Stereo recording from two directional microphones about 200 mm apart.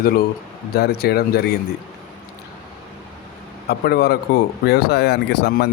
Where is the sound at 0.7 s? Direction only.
50° left (ahead or behind).